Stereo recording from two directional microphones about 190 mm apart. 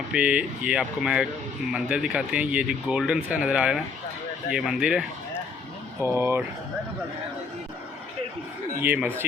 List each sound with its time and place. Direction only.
0.1 s speech: 5° right (ahead or behind)
8.8 s speech: 10° right (ahead or behind)